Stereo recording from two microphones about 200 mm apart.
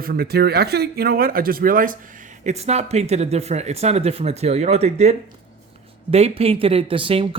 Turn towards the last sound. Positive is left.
turn(degrees=-25)  # may be behind; listen again after turning